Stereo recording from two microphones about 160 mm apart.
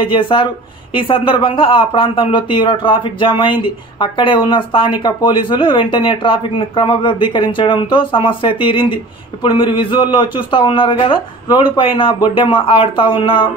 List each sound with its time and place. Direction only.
0.1 s speech: 30° left (ahead or behind)